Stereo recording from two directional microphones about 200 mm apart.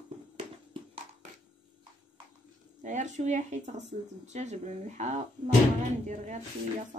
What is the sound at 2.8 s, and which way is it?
A woman's voice, 35° right (ahead or behind).